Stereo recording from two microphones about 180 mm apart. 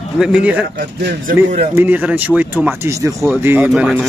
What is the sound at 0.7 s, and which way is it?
Speech, 55° right (ahead or behind).